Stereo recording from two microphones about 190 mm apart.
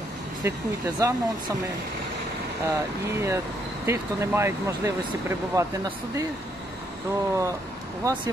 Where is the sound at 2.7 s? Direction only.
15° right (ahead or behind).